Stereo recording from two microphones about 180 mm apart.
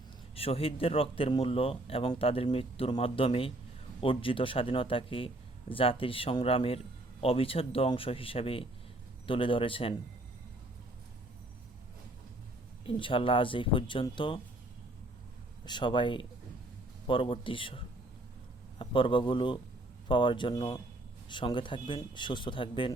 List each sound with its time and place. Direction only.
0.3 s a man's voice: 35° left (ahead or behind)
12.8 s speech: 30° left (ahead or behind)
15.6 s speech: 25° left (ahead or behind)